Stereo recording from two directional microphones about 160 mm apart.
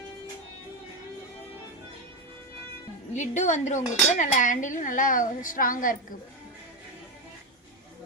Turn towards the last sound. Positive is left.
turn(degrees=60)  # may be behind; listen again after turning